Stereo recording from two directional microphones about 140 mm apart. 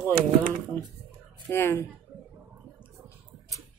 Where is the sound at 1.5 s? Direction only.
15° left (ahead or behind).